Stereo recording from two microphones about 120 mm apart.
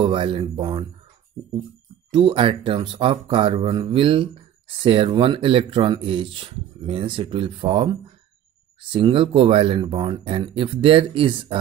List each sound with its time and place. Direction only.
0.0 s speech: 45° right (ahead or behind)
2.0 s speech: 45° right (ahead or behind)
8.9 s speech: 45° right (ahead or behind)